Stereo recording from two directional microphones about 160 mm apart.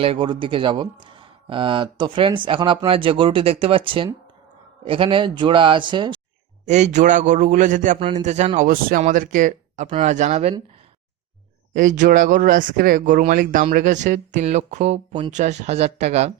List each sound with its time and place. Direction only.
0.0 s speech: 35° right (ahead or behind)
6.7 s speech: 45° right (ahead or behind)
7.9 s speech: 35° right (ahead or behind)
8.2 s speech: 45° right (ahead or behind)
11.7 s speech: 55° right (ahead or behind)